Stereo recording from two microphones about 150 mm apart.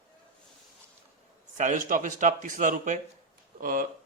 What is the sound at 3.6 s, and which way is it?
Speech, 70° right (ahead or behind).